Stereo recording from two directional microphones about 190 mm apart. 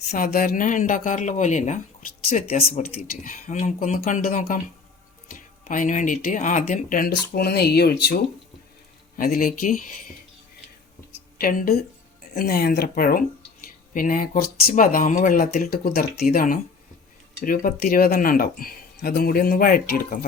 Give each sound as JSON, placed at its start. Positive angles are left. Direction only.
{"t": 0.1, "sound": "speech", "side_deg": 50}
{"t": 2.6, "sound": "speech", "side_deg": 50}
{"t": 7.3, "sound": "speech", "side_deg": 55}
{"t": 11.1, "sound": "a sound", "side_deg": 50}
{"t": 12.3, "sound": "speech", "side_deg": 50}